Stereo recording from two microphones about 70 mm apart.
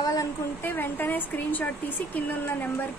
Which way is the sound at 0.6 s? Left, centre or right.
Left.